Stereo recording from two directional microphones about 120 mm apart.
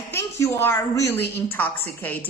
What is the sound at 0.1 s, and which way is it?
A woman's voice, 20° left (ahead or behind).